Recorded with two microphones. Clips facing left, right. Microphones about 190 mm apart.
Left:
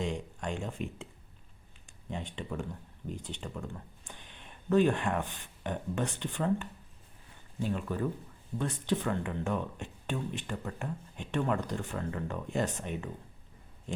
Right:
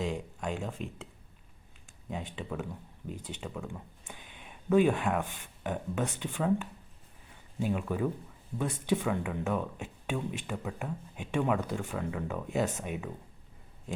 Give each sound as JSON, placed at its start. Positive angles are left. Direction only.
{"t": 0.0, "sound": "speech", "side_deg": -5}
{"t": 2.0, "sound": "speech", "side_deg": -5}